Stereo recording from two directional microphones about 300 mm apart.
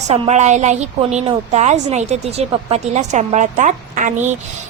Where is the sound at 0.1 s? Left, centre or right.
Right.